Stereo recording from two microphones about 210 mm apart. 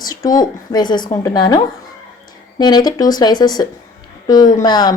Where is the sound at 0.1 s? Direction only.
20° left (ahead or behind).